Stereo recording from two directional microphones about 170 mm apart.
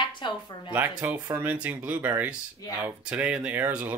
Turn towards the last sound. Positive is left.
turn(degrees=-10)  # may be behind; listen again after turning